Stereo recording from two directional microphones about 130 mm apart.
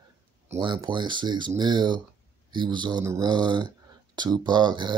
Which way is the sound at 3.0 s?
20° right (ahead or behind).